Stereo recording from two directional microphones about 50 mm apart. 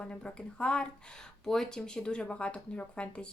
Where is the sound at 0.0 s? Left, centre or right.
Centre.